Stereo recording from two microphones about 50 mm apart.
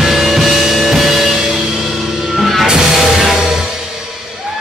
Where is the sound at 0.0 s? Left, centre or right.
Centre.